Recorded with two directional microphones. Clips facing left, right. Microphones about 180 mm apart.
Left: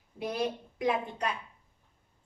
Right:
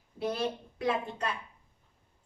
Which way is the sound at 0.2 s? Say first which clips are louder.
Even; 15° left (ahead or behind).